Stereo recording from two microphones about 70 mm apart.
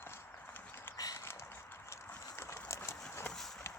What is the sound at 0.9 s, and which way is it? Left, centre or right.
Clip-clop, left.